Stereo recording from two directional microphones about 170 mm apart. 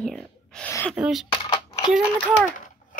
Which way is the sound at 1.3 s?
25° left (ahead or behind).